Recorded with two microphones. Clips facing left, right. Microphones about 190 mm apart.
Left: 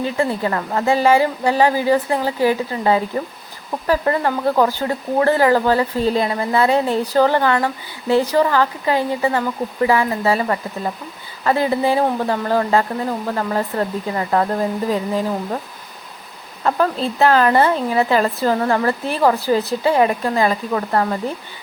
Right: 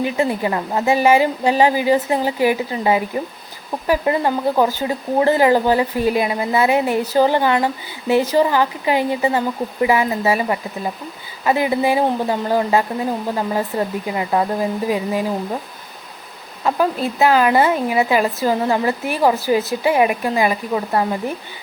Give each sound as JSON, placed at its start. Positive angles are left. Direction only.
{"t": 0.0, "sound": "speech", "side_deg": -15}
{"t": 16.6, "sound": "speech", "side_deg": -10}